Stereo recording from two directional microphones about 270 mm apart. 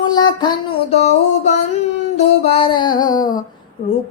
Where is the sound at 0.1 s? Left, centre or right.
Centre.